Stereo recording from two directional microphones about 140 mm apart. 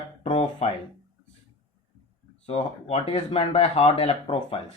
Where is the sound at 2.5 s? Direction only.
45° left (ahead or behind).